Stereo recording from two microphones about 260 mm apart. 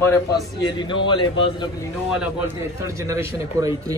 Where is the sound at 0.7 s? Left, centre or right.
Centre.